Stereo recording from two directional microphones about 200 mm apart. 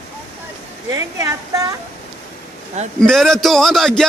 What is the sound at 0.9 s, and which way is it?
Speech, 15° right (ahead or behind).